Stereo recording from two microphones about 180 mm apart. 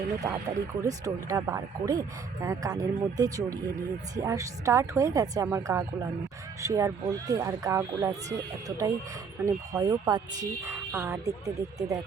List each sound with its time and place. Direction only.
0.8 s a woman's voice: 20° right (ahead or behind)